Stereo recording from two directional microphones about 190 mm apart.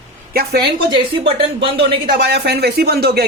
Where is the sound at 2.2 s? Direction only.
60° right (ahead or behind).